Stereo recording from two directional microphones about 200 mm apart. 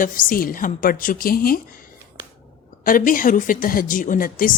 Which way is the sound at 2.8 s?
45° left (ahead or behind).